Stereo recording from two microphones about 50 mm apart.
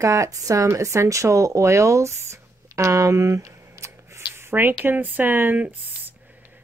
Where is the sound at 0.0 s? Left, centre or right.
Right.